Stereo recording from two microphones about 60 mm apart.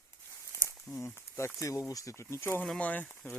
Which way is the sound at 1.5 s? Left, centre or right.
Left.